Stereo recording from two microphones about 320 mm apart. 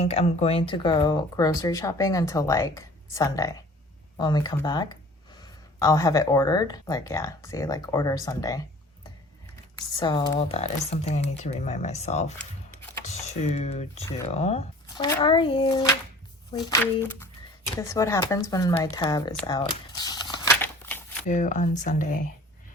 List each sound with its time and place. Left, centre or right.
0.0 s speech: centre
9.7 s speech: centre
13.4 s speech: left
19.5 s crumpling: centre
21.2 s speech: left